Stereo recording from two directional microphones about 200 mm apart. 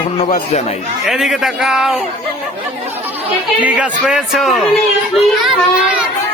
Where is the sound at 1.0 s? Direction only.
Centre (ahead or behind).